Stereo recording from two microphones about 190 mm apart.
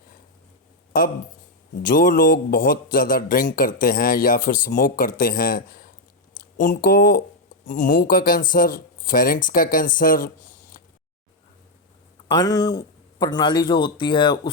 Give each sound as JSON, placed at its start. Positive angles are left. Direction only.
{"t": 1.8, "sound": "speech", "side_deg": 45}
{"t": 12.3, "sound": "speech", "side_deg": 20}